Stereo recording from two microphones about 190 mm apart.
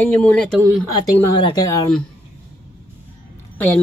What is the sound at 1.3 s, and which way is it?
Speech, 20° left (ahead or behind).